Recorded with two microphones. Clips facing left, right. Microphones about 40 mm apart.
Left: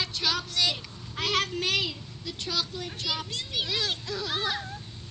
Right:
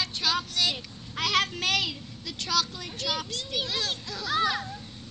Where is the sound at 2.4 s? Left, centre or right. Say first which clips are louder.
Right 4 dB; left.